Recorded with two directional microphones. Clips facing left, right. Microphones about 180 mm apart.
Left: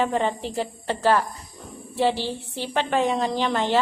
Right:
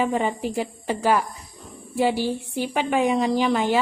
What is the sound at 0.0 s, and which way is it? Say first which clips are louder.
A woman's voice: right 1 dB; 10° right (ahead or behind).